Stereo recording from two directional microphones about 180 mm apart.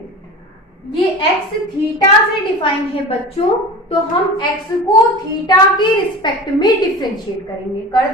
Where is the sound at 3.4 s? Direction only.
35° left (ahead or behind).